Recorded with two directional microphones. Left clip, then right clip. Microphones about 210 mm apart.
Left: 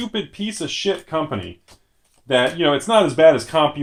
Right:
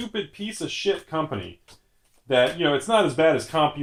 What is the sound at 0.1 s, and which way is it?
Speech, 45° left (ahead or behind).